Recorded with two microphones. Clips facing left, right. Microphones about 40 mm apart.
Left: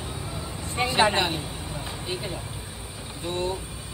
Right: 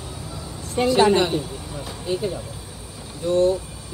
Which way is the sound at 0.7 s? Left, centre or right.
Left.